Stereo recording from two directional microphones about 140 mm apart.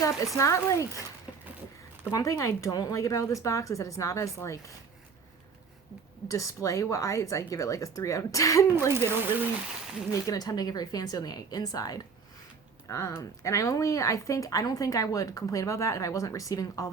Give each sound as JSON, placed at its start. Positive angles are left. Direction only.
{"t": 0.3, "sound": "speech", "side_deg": 20}
{"t": 2.0, "sound": "speech", "side_deg": 25}
{"t": 6.2, "sound": "speech", "side_deg": 20}
{"t": 8.9, "sound": "speech", "side_deg": -15}
{"t": 10.1, "sound": "speech", "side_deg": 25}